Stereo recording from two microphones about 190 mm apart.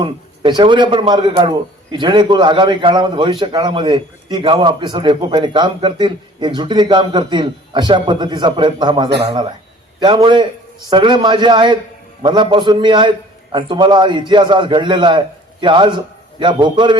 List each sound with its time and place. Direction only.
0.0 s a man's voice: 25° right (ahead or behind)